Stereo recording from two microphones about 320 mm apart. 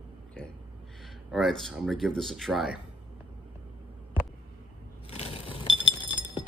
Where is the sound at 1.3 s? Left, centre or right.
Centre.